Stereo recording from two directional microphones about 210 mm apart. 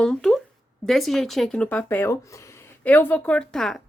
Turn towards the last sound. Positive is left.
turn(degrees=5)  # may be behind; listen again after turning